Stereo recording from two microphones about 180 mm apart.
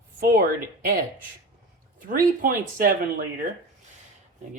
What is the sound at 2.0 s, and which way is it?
Speech, 50° right (ahead or behind).